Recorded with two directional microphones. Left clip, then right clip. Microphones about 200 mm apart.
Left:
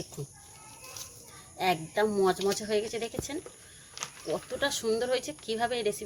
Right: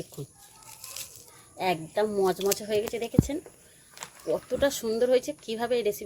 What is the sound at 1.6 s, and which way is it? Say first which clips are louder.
Speech: right 1 dB; 40° right (ahead or behind).